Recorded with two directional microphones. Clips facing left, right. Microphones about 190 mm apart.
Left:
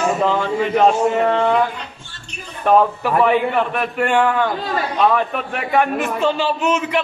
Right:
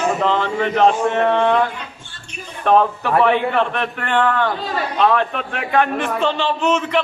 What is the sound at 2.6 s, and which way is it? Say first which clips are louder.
A man's voice: left 1 dB; 10° left (ahead or behind).